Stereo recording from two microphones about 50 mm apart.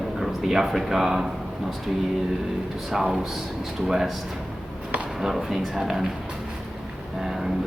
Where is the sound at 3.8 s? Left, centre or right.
Centre.